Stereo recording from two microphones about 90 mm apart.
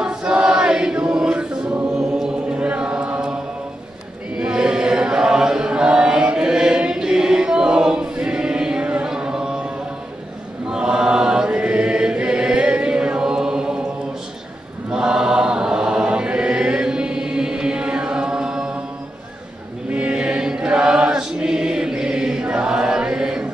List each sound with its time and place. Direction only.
0.0 s choir: 10° right (ahead or behind)
4.4 s chant: 10° right (ahead or behind)
10.7 s chant: 10° right (ahead or behind)
14.9 s chant: 10° right (ahead or behind)
19.9 s choir: 15° right (ahead or behind)